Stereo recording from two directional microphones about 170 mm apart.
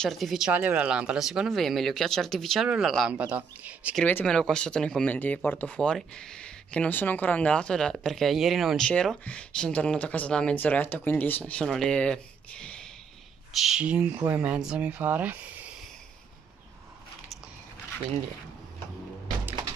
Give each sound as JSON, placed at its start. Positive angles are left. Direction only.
{"t": 0.0, "sound": "speech", "side_deg": 0}
{"t": 4.0, "sound": "speech", "side_deg": 10}